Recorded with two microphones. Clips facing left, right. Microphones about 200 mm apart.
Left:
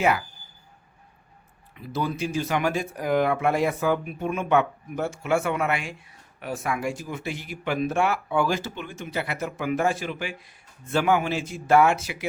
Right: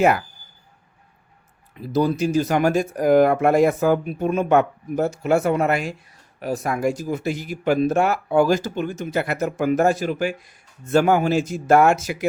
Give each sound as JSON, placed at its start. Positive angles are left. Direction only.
{"t": 1.7, "sound": "speech", "side_deg": -40}